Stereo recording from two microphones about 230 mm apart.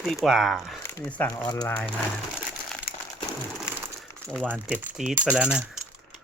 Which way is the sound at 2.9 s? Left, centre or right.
Left.